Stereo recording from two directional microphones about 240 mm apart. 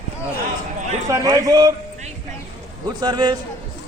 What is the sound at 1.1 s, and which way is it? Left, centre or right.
Speech, centre.